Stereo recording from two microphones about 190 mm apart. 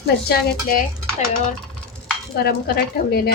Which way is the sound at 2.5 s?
55° left (ahead or behind).